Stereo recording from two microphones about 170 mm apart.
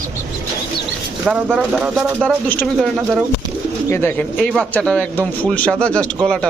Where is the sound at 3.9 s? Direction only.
15° left (ahead or behind).